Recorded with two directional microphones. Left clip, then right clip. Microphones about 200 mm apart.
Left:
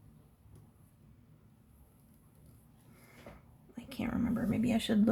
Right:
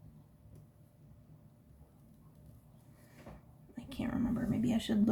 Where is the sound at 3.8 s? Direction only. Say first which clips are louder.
Left 1 dB; 30° left (ahead or behind).